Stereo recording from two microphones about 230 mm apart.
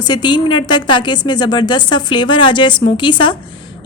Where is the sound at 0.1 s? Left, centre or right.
Centre.